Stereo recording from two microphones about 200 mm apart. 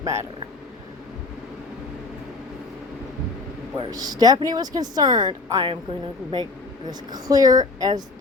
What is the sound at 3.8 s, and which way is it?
A woman's voice, 20° right (ahead or behind).